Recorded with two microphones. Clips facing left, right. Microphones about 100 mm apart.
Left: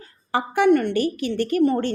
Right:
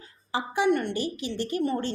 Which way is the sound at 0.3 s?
55° left (ahead or behind).